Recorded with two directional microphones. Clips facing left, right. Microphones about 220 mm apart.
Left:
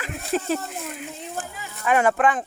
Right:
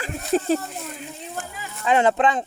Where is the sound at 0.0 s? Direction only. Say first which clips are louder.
Right 3 dB; 35° right (ahead or behind).